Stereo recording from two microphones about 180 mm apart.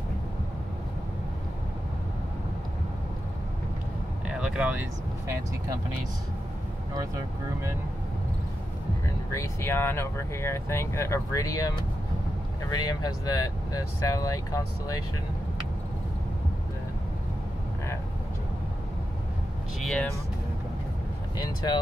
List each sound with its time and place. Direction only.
4.3 s speech: 5° right (ahead or behind)
9.3 s speech: 15° left (ahead or behind)
12.7 s speech: 20° left (ahead or behind)
19.8 s speech: centre (ahead or behind)
21.4 s speech: 20° left (ahead or behind)